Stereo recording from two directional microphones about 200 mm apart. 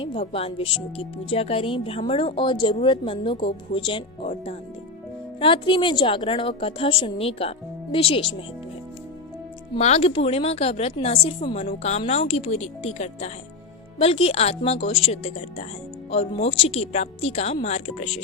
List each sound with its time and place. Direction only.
0.0 s speech: 25° left (ahead or behind)
9.7 s a woman's voice: 30° left (ahead or behind)